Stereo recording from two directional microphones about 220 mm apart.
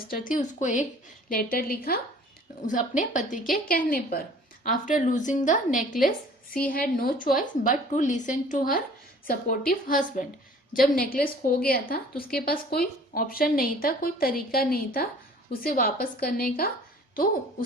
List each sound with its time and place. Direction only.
0.1 s a woman's voice: 35° left (ahead or behind)